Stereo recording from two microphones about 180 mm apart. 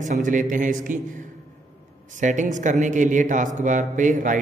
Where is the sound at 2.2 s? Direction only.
45° right (ahead or behind).